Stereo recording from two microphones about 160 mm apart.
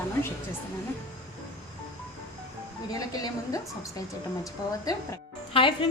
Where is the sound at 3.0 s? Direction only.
25° left (ahead or behind).